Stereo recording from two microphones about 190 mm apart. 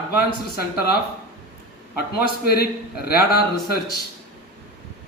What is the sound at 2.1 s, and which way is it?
A man's voice, 55° left (ahead or behind).